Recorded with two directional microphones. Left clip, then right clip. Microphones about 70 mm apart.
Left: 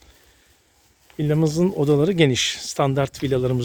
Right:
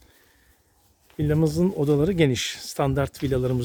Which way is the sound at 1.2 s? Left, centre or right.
Right.